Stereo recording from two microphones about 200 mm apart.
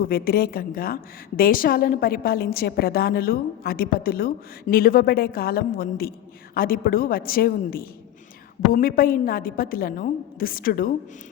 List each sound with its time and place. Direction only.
0.0 s a woman's voice: 50° left (ahead or behind)